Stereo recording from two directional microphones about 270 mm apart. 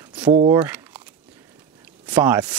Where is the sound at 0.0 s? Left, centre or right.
Centre.